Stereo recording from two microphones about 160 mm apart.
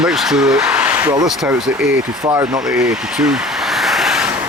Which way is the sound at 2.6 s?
5° right (ahead or behind).